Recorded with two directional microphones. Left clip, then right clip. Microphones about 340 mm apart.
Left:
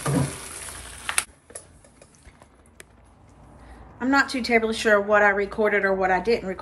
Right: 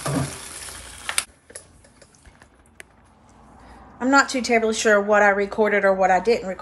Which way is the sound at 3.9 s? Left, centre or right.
Centre.